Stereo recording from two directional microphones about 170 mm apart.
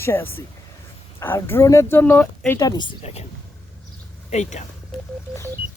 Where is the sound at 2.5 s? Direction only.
25° left (ahead or behind).